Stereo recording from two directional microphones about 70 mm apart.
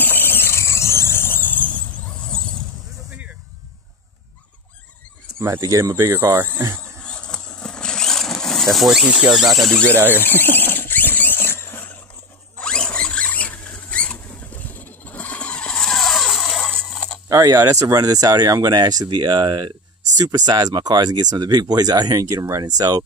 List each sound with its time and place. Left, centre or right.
0.0 s squeal: left
2.2 s vehicle: centre
5.6 s speech: right
6.0 s speech: right
7.1 s vehicle: centre
8.7 s speech: centre
9.8 s speech: right
10.1 s squeal: left
12.5 s zipper: centre
13.7 s rodents: centre
17.3 s speech: right
20.2 s speech: right
22.6 s speech: right